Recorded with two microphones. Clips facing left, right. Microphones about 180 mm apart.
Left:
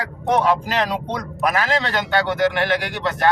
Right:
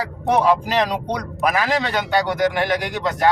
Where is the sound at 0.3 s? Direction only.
10° right (ahead or behind).